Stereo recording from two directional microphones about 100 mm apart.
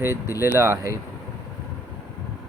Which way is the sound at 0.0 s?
25° right (ahead or behind).